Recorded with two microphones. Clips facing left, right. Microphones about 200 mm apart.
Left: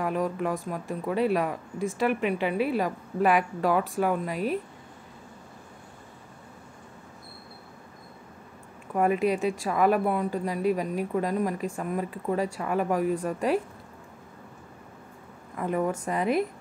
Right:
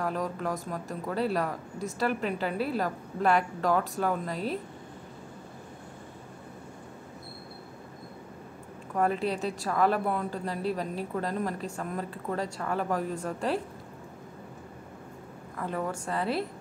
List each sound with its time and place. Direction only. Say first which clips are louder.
0.0 s a woman's voice: left 4 dB; 10° left (ahead or behind)
8.9 s a woman's voice: left 4 dB; 10° left (ahead or behind)
15.5 s a woman's voice: left 5 dB; 15° left (ahead or behind)